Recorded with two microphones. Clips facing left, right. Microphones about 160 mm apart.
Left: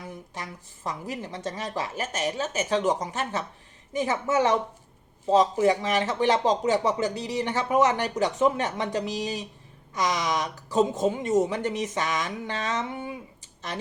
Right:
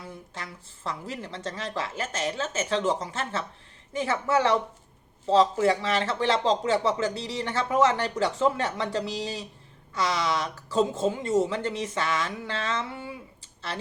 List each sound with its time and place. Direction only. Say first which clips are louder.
0.0 s speech: left 2 dB; 15° left (ahead or behind)